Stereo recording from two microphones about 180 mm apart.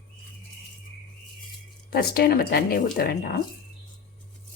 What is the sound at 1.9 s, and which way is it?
Speech, 60° left (ahead or behind).